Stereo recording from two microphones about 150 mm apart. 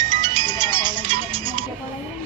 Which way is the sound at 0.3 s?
30° right (ahead or behind).